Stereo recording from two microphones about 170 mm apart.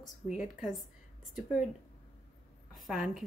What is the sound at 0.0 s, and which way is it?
Speech, 50° left (ahead or behind).